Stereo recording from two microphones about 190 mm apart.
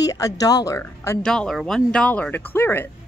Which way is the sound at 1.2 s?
5° left (ahead or behind).